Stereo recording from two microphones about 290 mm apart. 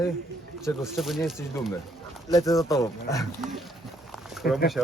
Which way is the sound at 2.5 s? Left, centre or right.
Centre.